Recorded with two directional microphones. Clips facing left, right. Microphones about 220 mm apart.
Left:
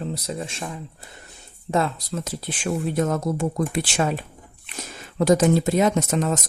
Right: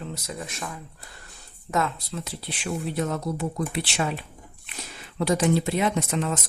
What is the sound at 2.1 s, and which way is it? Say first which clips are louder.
Speech: left 5 dB; 45° left (ahead or behind).